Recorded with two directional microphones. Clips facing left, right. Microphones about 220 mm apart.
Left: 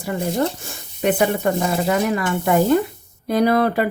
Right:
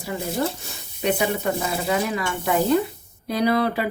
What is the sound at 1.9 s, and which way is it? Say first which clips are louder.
Speech: left 2 dB; 50° left (ahead or behind).